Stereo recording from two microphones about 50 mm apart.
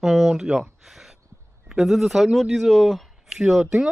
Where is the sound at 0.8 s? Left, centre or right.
Centre.